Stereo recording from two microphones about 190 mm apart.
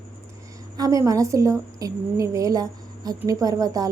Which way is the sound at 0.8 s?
20° right (ahead or behind).